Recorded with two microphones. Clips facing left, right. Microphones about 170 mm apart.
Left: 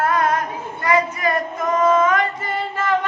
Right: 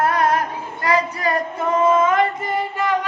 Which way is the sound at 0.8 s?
35° right (ahead or behind).